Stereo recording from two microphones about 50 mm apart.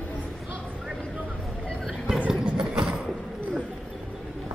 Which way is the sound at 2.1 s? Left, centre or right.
Right.